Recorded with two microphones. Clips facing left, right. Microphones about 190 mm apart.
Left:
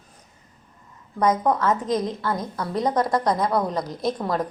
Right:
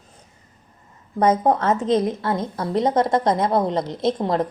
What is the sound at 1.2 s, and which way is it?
A woman's voice, 30° right (ahead or behind).